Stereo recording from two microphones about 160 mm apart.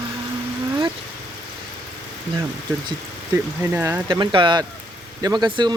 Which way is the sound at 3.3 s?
15° right (ahead or behind).